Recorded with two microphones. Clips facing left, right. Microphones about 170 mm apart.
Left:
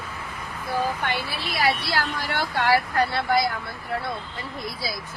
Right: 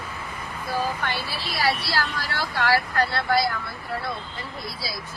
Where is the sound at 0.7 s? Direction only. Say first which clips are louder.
Left 1 dB; 15° left (ahead or behind).